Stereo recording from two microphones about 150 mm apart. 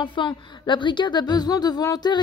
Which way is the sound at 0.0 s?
30° left (ahead or behind).